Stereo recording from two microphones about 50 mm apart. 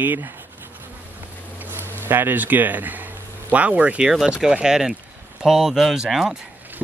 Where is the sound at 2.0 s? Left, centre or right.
Right.